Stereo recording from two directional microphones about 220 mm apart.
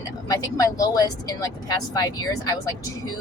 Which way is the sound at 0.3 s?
15° left (ahead or behind).